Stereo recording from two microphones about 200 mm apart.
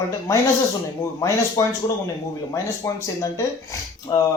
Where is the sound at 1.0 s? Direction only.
15° left (ahead or behind).